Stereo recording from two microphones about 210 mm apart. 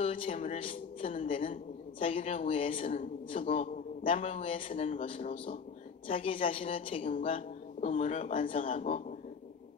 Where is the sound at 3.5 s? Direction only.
25° left (ahead or behind).